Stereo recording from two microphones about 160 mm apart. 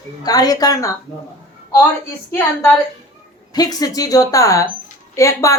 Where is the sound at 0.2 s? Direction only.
25° left (ahead or behind).